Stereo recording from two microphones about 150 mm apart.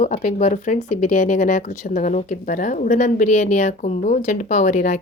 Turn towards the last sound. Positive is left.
turn(degrees=55)  # may be behind; listen again after turning